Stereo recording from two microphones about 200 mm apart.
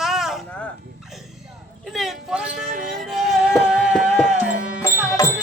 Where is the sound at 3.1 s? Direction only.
Centre (ahead or behind).